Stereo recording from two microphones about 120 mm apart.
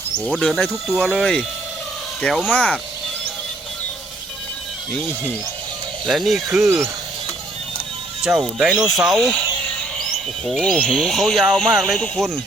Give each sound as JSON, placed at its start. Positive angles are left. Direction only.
{"t": 0.3, "sound": "speech", "side_deg": 5}
{"t": 2.5, "sound": "speech", "side_deg": 10}
{"t": 4.9, "sound": "speech", "side_deg": 10}
{"t": 6.7, "sound": "speech", "side_deg": -25}
{"t": 8.2, "sound": "speech", "side_deg": -5}
{"t": 10.4, "sound": "speech", "side_deg": 0}